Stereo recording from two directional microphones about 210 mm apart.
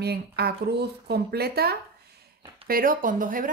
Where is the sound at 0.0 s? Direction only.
50° right (ahead or behind).